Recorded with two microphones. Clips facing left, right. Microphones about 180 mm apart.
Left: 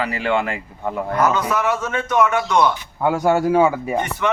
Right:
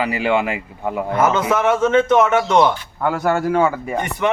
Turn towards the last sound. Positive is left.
turn(degrees=10)  # may be behind; listen again after turning